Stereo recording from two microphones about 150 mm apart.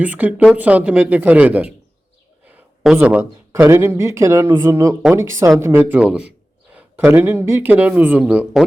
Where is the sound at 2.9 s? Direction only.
10° right (ahead or behind).